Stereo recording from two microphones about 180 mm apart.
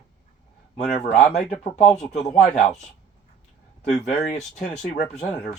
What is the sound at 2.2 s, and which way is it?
Speech, 30° left (ahead or behind).